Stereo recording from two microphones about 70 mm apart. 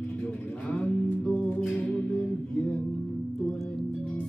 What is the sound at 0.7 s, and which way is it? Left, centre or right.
Music, centre.